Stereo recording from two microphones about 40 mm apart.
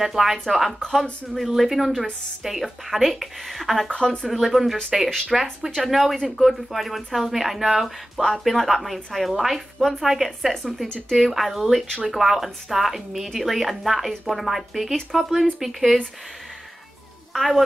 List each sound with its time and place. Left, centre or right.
0.0 s speech: centre
0.7 s a woman's voice: centre
3.9 s speech: left
4.3 s a woman's voice: centre
10.5 s a woman's voice: centre
17.3 s speech: centre